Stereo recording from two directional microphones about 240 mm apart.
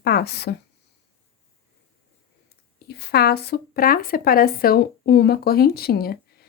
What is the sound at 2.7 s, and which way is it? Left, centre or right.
Speech, left.